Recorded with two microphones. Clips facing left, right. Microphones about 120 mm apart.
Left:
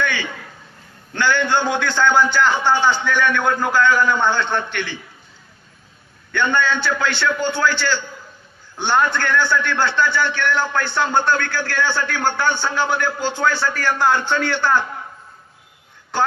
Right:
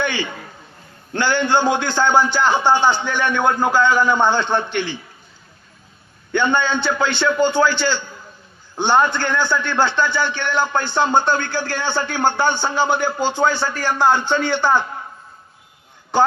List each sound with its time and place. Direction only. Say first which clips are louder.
0.0 s a sound: right 1 dB; 20° right (ahead or behind)
1.1 s a man's voice: right 1 dB; 15° right (ahead or behind)
6.3 s a man's voice: right 1 dB; 20° right (ahead or behind)
16.1 s a woman's voice: right 4 dB; 15° right (ahead or behind)